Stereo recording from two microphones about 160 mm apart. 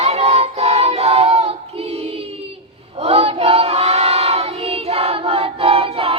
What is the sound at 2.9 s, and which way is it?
Child singing, 40° right (ahead or behind).